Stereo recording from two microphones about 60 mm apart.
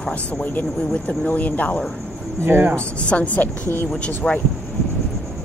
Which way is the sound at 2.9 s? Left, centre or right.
Left.